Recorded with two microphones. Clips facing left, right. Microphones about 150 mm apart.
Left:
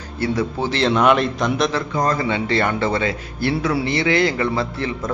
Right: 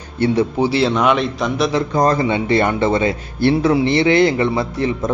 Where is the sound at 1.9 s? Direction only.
35° right (ahead or behind).